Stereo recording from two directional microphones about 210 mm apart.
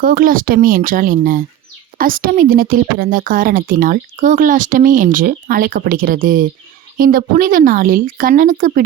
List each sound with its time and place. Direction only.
0.0 s speech: 40° right (ahead or behind)